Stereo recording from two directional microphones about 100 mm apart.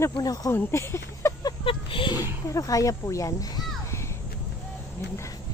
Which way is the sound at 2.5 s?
35° left (ahead or behind).